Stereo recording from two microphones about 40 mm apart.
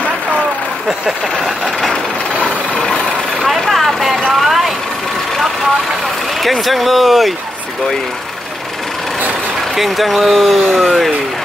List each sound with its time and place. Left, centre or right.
0.8 s speech: centre
1.6 s vehicle: centre
2.4 s vehicle: left
3.4 s vehicle: centre
6.4 s speech: centre
9.8 s speech: centre